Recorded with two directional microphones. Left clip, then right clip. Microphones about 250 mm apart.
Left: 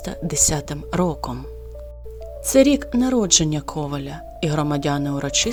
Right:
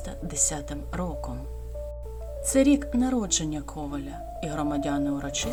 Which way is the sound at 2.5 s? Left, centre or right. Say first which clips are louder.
Left 7 dB; left.